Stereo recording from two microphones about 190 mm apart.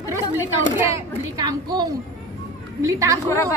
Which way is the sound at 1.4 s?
20° right (ahead or behind).